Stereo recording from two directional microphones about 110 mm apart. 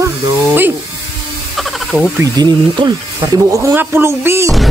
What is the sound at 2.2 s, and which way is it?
Speech, 40° right (ahead or behind).